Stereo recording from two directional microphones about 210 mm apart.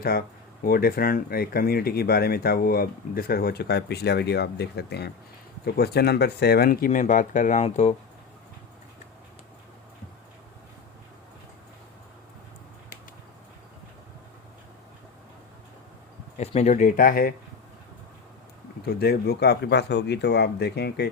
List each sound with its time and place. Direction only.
0.6 s speech: 45° left (ahead or behind)
16.4 s speech: 30° left (ahead or behind)
18.9 s speech: 50° left (ahead or behind)